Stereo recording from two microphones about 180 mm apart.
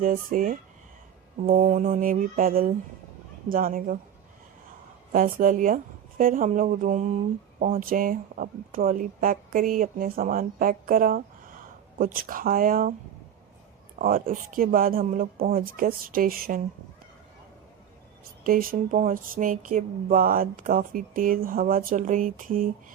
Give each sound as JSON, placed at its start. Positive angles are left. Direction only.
{"t": 0.0, "sound": "speech", "side_deg": -50}
{"t": 5.1, "sound": "speech", "side_deg": -50}
{"t": 14.0, "sound": "speech", "side_deg": -50}
{"t": 18.4, "sound": "speech", "side_deg": -50}